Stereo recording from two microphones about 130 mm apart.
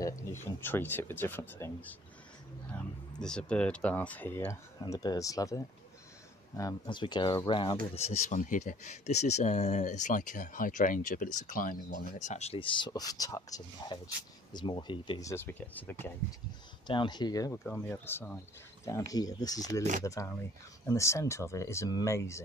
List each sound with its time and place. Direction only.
0.0 s speech: 20° left (ahead or behind)
3.2 s speech: 5° left (ahead or behind); by 5.6 s 25° left (ahead or behind)
6.9 s speech: 35° left (ahead or behind); by 8.4 s 50° left (ahead or behind)
8.4 s speech: 90° left; by 15.2 s 35° left (ahead or behind)
15.2 s speech: 20° left (ahead or behind)
16.8 s speech: 40° left (ahead or behind)
17.6 s speech: 15° left (ahead or behind)
18.9 s speech: 25° left (ahead or behind)